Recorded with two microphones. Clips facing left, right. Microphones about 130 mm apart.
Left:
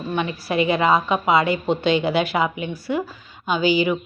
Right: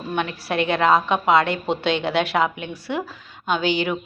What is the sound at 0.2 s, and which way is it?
A woman's voice, centre (ahead or behind).